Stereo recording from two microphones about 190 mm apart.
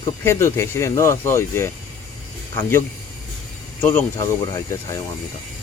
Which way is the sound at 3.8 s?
10° left (ahead or behind).